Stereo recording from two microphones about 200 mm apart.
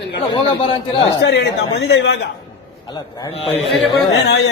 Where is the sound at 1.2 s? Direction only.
60° left (ahead or behind).